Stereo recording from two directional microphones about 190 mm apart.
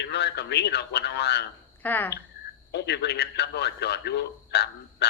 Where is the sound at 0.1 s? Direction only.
60° left (ahead or behind).